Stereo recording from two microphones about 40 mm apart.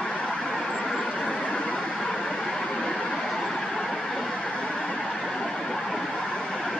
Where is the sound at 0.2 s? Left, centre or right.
Centre.